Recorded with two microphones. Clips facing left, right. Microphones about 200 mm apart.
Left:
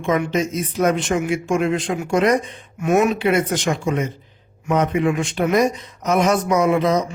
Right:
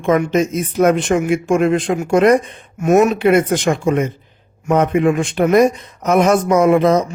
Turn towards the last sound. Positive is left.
turn(degrees=-50)  # may be behind; listen again after turning